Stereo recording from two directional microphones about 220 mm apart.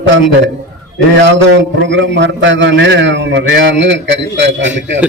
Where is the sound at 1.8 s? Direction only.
55° right (ahead or behind).